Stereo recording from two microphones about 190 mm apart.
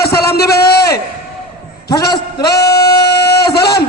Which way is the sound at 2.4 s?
60° left (ahead or behind).